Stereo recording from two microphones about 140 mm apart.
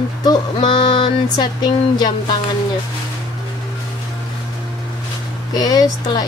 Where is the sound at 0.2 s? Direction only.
30° left (ahead or behind).